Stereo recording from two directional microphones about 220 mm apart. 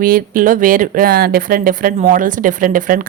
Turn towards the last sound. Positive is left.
turn(degrees=-40)  # may be behind; listen again after turning